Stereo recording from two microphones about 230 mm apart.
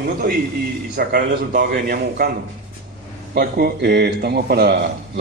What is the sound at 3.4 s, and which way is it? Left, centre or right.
Speech, right.